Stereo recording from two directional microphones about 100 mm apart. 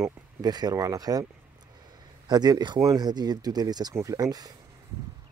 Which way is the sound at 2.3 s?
45° right (ahead or behind).